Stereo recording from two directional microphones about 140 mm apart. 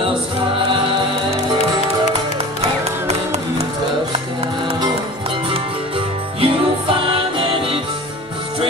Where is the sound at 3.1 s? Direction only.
50° right (ahead or behind).